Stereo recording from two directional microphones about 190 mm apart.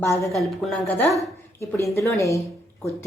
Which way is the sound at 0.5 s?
Centre (ahead or behind).